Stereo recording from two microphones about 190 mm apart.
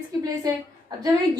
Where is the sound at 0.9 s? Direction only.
20° right (ahead or behind).